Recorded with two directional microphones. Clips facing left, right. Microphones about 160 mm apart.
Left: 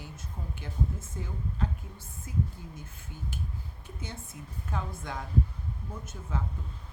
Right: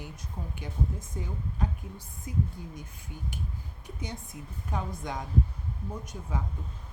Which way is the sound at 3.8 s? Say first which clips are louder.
Right 4 dB; 15° right (ahead or behind).